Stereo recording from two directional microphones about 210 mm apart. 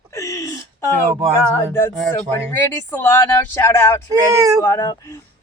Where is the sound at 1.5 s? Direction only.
15° left (ahead or behind).